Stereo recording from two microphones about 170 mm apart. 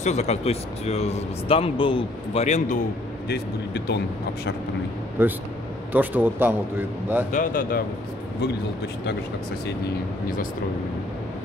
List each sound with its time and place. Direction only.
0.0 s speech: 40° left (ahead or behind)
3.3 s speech: 75° left (ahead or behind)
5.2 s a man's voice: 10° right (ahead or behind)
7.3 s speech: 55° left (ahead or behind)